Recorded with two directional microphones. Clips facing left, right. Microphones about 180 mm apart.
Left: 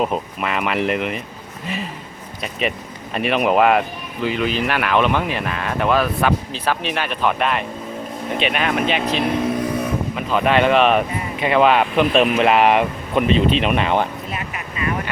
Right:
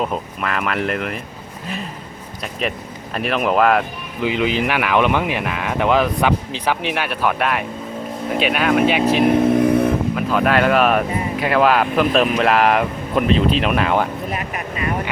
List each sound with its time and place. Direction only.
0.0 s speech: 5° left (ahead or behind)
2.4 s speech: centre (ahead or behind)
4.2 s speech: 15° right (ahead or behind)
9.5 s vehicle: 50° right (ahead or behind)
10.2 s speech: centre (ahead or behind)